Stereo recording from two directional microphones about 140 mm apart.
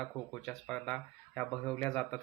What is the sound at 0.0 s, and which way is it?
Speech, 5° left (ahead or behind).